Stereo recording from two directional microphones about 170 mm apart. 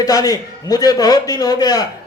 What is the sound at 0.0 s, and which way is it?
Speech, 20° left (ahead or behind).